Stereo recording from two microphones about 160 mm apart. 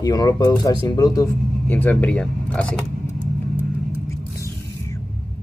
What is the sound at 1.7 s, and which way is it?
Speech, 10° left (ahead or behind).